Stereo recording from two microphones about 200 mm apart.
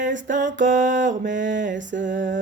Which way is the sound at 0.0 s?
40° right (ahead or behind).